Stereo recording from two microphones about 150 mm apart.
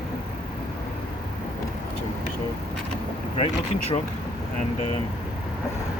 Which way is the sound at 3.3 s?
45° left (ahead or behind).